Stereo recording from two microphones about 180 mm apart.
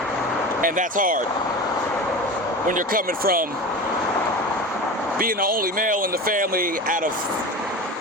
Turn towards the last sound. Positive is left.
turn(degrees=-50)  # may be behind; listen again after turning